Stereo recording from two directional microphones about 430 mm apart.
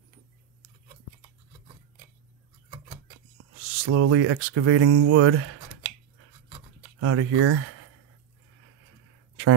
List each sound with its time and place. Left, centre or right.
3.7 s speech: right
7.0 s speech: right